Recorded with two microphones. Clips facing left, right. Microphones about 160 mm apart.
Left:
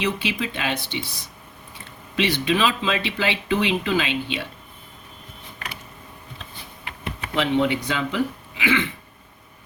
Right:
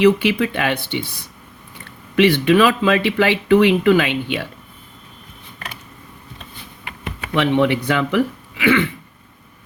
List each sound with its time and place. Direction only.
0.0 s speech: 60° right (ahead or behind)
2.1 s speech: 55° right (ahead or behind)
7.3 s speech: 65° right (ahead or behind)